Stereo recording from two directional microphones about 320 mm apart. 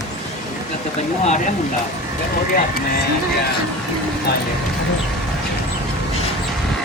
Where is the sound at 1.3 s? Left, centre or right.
Left.